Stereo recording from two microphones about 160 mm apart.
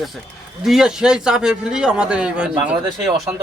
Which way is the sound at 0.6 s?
5° right (ahead or behind).